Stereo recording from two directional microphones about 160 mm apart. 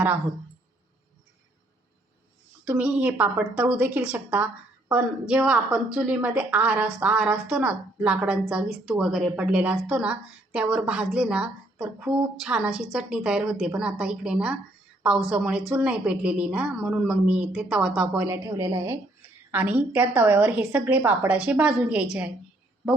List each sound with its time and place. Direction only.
2.6 s a woman's voice: 10° right (ahead or behind)
18.3 s a woman's voice: 15° right (ahead or behind)